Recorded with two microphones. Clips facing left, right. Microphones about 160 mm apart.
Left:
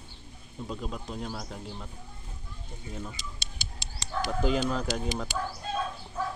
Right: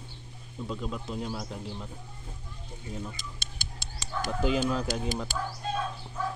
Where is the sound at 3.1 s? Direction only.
50° right (ahead or behind).